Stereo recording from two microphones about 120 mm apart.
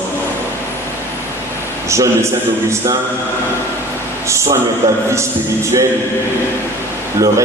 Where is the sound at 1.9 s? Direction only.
25° right (ahead or behind).